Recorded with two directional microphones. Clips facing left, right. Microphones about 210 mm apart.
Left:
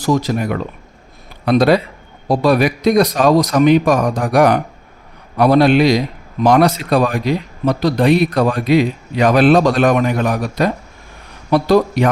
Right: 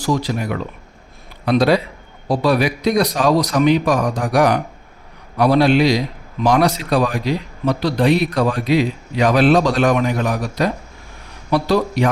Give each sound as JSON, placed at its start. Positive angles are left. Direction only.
{"t": 0.0, "sound": "speech", "side_deg": 50}